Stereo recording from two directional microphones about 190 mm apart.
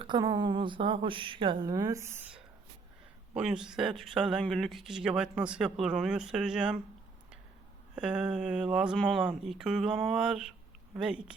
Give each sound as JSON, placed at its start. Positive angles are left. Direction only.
{"t": 0.0, "sound": "a woman's voice", "side_deg": -25}
{"t": 3.3, "sound": "speech", "side_deg": -5}
{"t": 7.9, "sound": "speech", "side_deg": -5}